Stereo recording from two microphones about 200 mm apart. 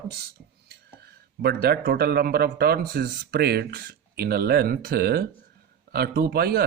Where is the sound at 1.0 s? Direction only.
55° right (ahead or behind).